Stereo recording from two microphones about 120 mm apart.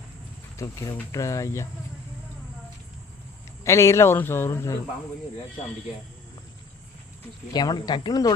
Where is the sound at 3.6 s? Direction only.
25° left (ahead or behind).